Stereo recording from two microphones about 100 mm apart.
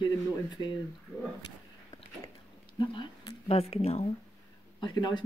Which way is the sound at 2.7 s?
50° left (ahead or behind).